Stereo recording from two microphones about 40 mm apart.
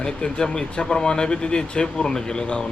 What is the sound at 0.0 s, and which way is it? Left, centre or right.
Speech, left.